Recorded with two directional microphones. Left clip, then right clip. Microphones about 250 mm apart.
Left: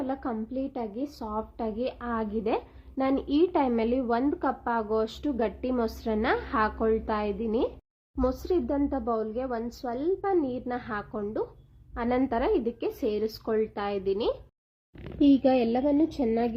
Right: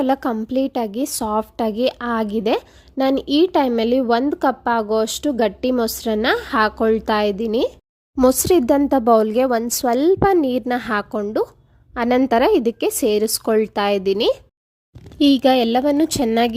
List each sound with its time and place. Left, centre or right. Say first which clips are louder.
0.0 s speech: right 13 dB; right
8.1 s speech: right 13 dB; right